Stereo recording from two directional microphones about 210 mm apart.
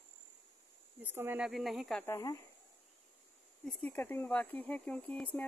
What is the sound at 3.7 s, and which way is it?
Speech, 5° left (ahead or behind).